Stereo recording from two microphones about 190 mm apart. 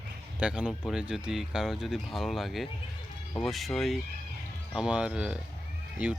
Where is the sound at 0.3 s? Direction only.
5° right (ahead or behind).